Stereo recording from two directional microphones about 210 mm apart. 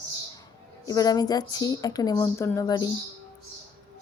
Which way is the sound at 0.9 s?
15° left (ahead or behind).